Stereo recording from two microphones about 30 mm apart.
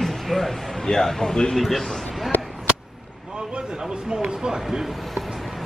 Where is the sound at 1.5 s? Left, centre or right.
Centre.